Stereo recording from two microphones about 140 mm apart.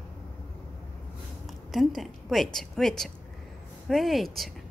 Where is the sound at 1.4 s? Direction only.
Centre (ahead or behind).